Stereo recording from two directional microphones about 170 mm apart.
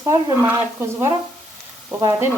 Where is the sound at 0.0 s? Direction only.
20° right (ahead or behind).